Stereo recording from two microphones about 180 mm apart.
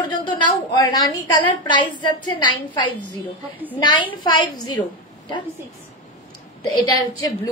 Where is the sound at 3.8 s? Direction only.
25° left (ahead or behind).